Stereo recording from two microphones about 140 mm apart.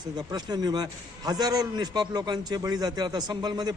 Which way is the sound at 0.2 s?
30° right (ahead or behind).